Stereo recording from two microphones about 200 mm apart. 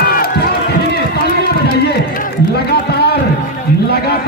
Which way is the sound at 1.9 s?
55° left (ahead or behind).